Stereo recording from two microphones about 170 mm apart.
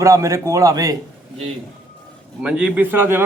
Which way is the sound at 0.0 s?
15° right (ahead or behind).